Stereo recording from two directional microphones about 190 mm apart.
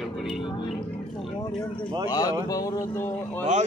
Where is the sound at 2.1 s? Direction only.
20° left (ahead or behind).